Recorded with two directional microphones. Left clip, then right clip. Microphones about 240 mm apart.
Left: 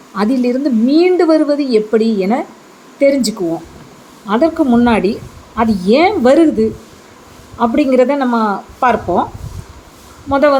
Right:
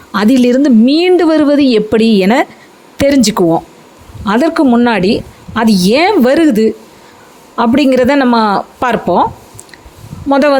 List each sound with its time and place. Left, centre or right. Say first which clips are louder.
0.1 s a woman's voice: right 6 dB; right
10.2 s a woman's voice: right 2 dB; right